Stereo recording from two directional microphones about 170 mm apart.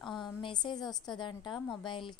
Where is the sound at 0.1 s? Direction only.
25° left (ahead or behind).